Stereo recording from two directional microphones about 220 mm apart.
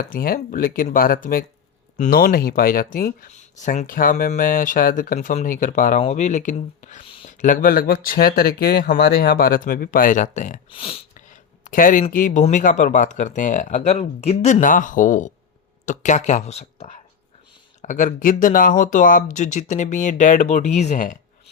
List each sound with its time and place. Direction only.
0.1 s speech: 40° left (ahead or behind)